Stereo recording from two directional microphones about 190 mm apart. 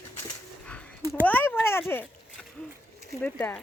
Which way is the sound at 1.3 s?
10° left (ahead or behind).